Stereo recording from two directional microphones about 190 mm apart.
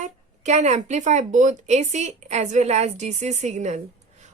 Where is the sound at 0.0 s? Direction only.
35° right (ahead or behind).